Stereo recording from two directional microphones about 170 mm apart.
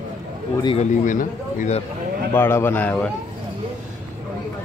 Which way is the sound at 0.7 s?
50° left (ahead or behind).